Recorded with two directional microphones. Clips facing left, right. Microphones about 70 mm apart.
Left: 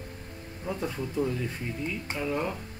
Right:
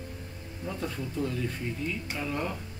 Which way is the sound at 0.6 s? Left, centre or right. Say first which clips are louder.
Left 2 dB; centre.